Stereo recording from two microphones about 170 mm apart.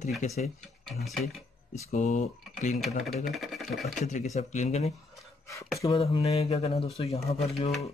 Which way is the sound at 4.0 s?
45° left (ahead or behind).